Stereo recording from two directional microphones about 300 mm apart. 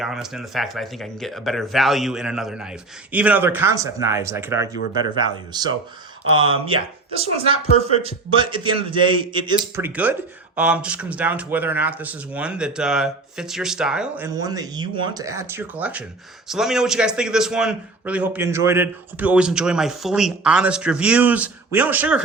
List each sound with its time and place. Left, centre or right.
0.0 s speech: centre